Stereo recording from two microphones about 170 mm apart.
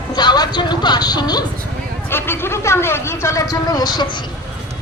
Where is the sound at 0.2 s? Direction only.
25° left (ahead or behind).